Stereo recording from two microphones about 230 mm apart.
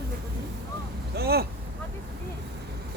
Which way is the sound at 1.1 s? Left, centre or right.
Right.